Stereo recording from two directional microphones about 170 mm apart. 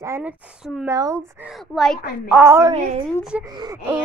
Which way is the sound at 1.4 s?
Centre (ahead or behind).